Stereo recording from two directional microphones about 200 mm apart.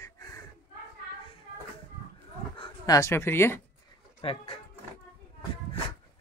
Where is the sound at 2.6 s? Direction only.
15° left (ahead or behind).